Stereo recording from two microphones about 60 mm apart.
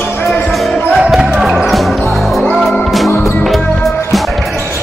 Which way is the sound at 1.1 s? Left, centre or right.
Centre.